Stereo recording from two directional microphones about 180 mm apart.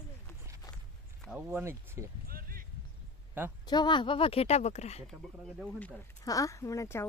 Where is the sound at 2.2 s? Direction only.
55° right (ahead or behind).